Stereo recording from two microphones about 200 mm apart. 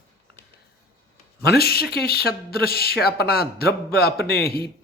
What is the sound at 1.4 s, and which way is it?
Speech, 50° left (ahead or behind).